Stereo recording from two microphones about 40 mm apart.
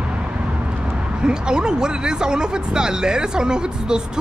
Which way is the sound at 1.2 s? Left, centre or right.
Right.